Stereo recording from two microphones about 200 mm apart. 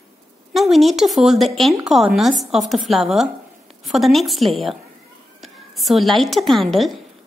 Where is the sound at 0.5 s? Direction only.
Centre (ahead or behind).